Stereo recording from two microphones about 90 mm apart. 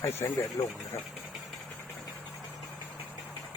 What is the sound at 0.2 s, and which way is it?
Speech, 35° left (ahead or behind).